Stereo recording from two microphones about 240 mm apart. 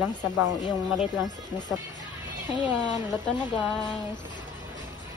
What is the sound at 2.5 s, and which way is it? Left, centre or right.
Speech, centre.